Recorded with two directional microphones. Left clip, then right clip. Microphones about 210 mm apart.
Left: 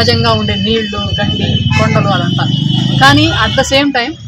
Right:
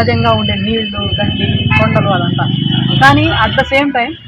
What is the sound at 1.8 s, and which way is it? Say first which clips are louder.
Speech: even; 20° left (ahead or behind).